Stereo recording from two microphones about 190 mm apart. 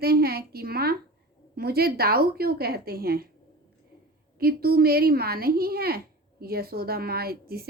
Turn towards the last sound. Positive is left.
turn(degrees=-55)  # may be behind; listen again after turning